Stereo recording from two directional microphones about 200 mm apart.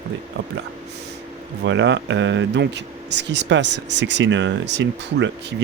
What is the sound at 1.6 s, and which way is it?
Speech, 65° right (ahead or behind).